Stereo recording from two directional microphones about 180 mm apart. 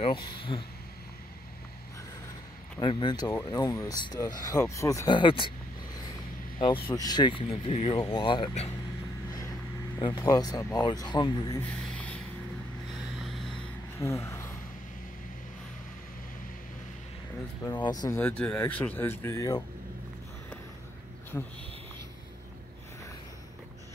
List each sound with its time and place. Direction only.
0.0 s speech: 30° left (ahead or behind)
2.8 s speech: 25° left (ahead or behind)
6.9 s speech: 25° left (ahead or behind)
9.9 s speech: 25° left (ahead or behind)
11.6 s a sound: 5° left (ahead or behind)
13.2 s vehicle: centre (ahead or behind)
13.9 s a sound: 15° left (ahead or behind)
17.8 s speech: 20° left (ahead or behind)
21.3 s speech: 10° left (ahead or behind)